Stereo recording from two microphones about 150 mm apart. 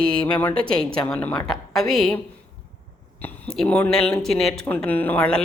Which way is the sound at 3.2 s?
5° left (ahead or behind).